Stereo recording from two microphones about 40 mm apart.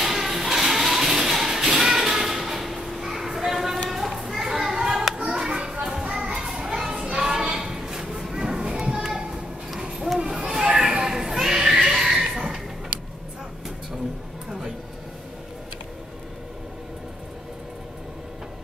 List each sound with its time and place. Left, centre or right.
0.0 s music: centre
3.9 s children playing: centre
5.5 s children playing: right
9.0 s children playing: centre
10.1 s a sound: centre
11.3 s music: centre